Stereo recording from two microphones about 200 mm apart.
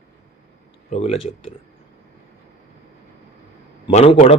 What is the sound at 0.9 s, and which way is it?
Speech, 30° left (ahead or behind).